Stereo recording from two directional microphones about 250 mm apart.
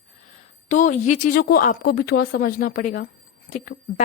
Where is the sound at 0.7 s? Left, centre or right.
Left.